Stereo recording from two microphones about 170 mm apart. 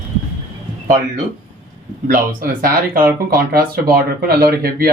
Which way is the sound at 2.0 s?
55° right (ahead or behind).